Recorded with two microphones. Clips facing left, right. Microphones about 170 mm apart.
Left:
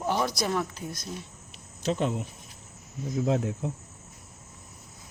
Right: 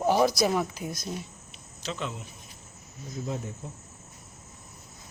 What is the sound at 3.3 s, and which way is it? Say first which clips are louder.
Speech: left 8 dB; 90° left.